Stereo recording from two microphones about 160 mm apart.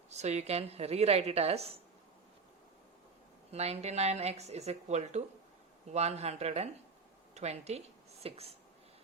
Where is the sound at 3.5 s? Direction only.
40° right (ahead or behind).